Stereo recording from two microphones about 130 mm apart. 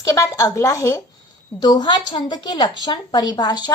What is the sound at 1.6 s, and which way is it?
A woman's voice, 35° left (ahead or behind).